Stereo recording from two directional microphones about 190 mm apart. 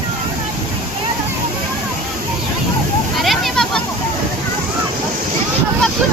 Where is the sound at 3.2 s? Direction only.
Centre (ahead or behind).